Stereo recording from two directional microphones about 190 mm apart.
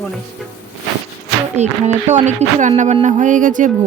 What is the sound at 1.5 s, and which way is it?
A woman's voice, 35° right (ahead or behind).